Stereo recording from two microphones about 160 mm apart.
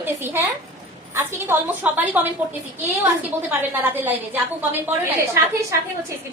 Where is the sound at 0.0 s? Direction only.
15° right (ahead or behind).